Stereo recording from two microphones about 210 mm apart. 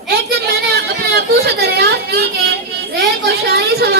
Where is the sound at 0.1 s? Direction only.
50° right (ahead or behind).